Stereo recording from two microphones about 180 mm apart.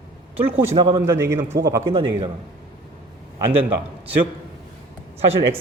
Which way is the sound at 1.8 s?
30° right (ahead or behind).